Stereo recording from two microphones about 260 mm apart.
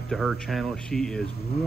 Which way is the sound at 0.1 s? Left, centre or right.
Centre.